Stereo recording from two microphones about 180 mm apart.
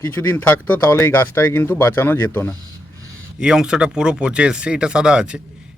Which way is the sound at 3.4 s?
5° right (ahead or behind).